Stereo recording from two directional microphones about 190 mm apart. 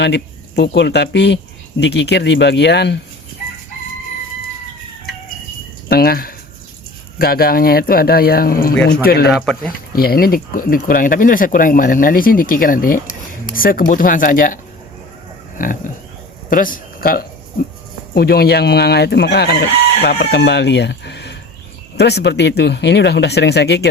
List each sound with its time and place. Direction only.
0.0 s speech: 65° left (ahead or behind)
1.8 s chicken: 65° left (ahead or behind)
5.9 s speech: 55° left (ahead or behind)
8.9 s chicken: 55° left (ahead or behind)
9.3 s speech: 5° left (ahead or behind)
9.9 s speech: 50° left (ahead or behind)
15.5 s pig: 45° left (ahead or behind)
16.5 s speech: 45° left (ahead or behind)
18.1 s chicken: 55° left (ahead or behind)